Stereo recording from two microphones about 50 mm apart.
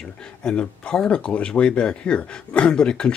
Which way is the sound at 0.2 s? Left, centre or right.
Centre.